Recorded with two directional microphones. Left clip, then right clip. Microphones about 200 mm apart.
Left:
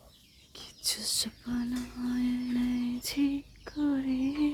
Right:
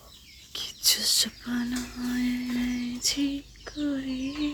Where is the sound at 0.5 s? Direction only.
Centre (ahead or behind).